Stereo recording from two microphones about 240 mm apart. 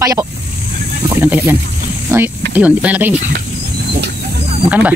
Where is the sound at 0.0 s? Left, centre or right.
Centre.